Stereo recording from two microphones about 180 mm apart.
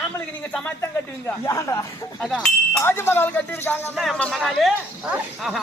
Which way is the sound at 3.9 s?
Centre (ahead or behind).